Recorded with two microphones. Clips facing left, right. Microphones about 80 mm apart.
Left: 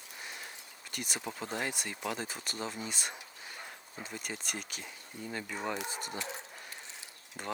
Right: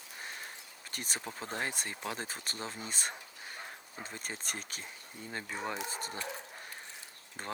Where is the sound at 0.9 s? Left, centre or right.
Right.